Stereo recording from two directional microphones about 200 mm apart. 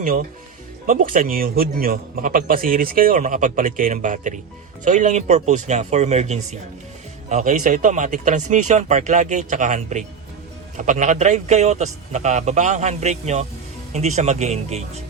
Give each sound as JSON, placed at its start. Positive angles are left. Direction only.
{"t": 0.0, "sound": "a man's voice", "side_deg": -40}